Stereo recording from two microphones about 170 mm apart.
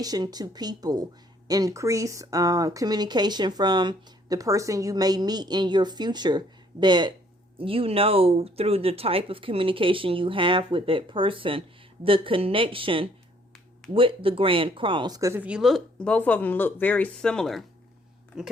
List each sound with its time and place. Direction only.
0.0 s speech: 20° right (ahead or behind); by 18.5 s 5° right (ahead or behind)